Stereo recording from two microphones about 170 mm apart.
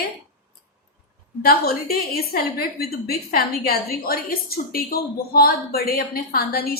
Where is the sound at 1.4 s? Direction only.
60° left (ahead or behind).